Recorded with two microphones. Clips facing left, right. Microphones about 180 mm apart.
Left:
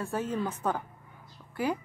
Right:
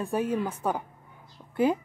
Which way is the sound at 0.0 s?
15° right (ahead or behind).